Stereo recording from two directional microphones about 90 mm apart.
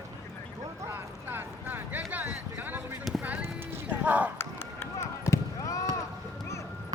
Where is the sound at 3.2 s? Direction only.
20° right (ahead or behind).